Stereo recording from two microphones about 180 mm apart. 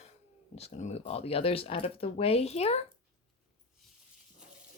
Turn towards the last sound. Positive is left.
turn(degrees=35)  # may be behind; listen again after turning